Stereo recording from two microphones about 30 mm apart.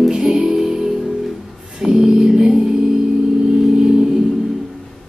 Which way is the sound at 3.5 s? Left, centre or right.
Right.